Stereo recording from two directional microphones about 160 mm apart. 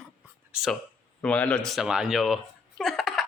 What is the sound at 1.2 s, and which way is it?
A man's voice, 10° left (ahead or behind).